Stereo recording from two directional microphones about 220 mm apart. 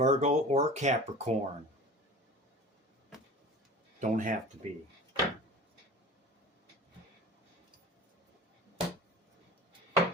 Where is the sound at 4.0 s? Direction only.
35° right (ahead or behind).